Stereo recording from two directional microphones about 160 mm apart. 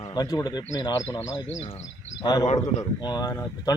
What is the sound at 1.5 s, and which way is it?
Speech, 40° left (ahead or behind).